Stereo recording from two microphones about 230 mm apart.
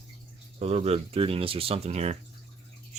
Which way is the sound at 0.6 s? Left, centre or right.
Right.